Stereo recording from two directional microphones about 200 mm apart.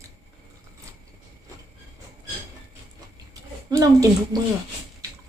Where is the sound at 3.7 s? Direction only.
15° right (ahead or behind).